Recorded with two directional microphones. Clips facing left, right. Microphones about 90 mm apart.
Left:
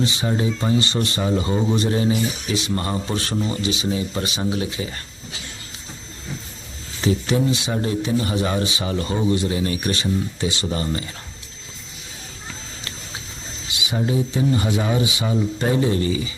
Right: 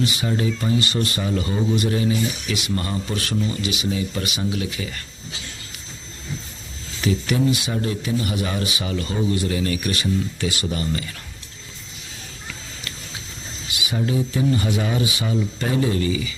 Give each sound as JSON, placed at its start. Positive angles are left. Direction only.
{"t": 0.0, "sound": "speech", "side_deg": 30}
{"t": 7.0, "sound": "speech", "side_deg": 30}
{"t": 12.5, "sound": "a sound", "side_deg": 30}
{"t": 14.6, "sound": "speech", "side_deg": 25}